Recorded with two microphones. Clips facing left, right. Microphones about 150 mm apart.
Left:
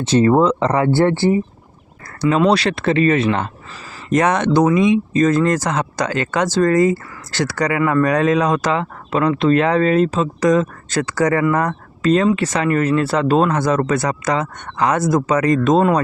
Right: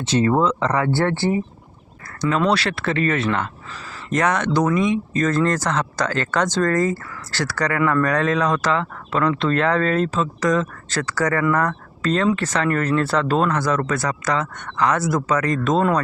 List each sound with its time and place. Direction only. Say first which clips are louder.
0.1 s speech: left 5 dB; 35° left (ahead or behind); by 1.3 s 15° left (ahead or behind)
2.3 s speech: left 5 dB; 15° left (ahead or behind)
5.3 s speech: left 3 dB; 10° left (ahead or behind)